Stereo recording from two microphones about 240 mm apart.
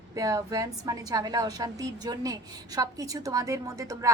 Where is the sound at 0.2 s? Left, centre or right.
Centre.